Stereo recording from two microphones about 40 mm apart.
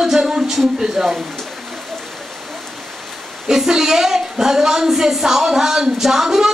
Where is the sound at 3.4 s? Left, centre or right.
Centre.